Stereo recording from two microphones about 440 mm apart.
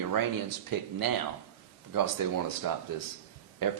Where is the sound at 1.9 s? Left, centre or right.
Right.